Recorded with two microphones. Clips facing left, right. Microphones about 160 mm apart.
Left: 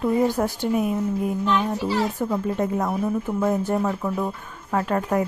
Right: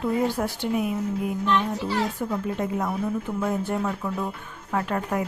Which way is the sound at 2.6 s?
50° left (ahead or behind).